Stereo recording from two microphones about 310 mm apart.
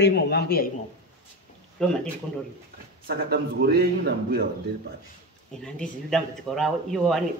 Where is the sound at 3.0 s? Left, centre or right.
Right.